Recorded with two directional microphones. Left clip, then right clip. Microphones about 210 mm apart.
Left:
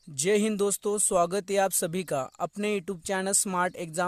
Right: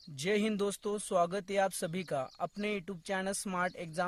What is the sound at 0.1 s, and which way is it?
Speech, 35° left (ahead or behind).